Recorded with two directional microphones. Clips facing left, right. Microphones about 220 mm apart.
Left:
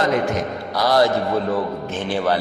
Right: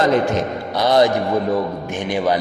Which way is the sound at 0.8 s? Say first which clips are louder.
Right 2 dB; 20° right (ahead or behind).